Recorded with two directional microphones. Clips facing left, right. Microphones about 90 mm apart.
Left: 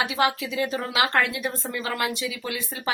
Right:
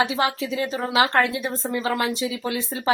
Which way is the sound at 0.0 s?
30° right (ahead or behind).